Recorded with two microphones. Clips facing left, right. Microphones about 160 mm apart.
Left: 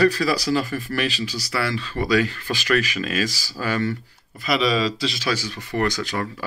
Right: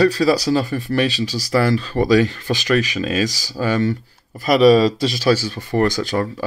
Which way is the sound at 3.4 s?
25° right (ahead or behind).